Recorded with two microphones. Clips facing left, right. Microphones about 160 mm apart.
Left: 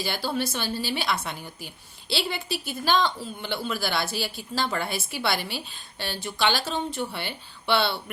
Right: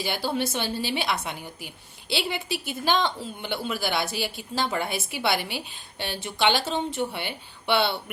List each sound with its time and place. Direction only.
0.0 s a woman's voice: 15° right (ahead or behind)